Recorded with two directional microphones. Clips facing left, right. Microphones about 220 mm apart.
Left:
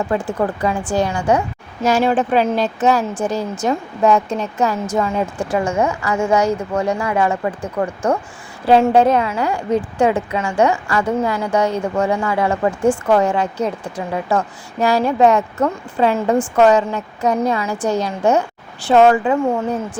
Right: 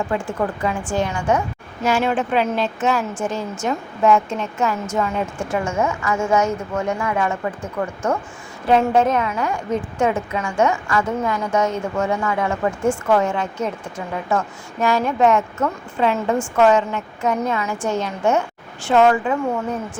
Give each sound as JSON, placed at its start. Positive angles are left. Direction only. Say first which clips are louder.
{"t": 0.1, "sound": "a woman's voice", "louder": "left 3 dB", "side_deg": 35}